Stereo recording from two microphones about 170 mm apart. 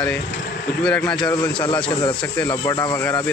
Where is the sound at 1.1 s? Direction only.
25° left (ahead or behind).